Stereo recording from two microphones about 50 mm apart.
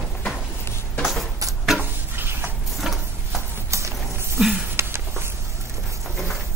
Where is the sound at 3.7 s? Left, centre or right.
Right.